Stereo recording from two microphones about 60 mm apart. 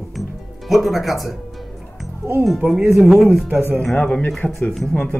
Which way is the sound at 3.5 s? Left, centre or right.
Right.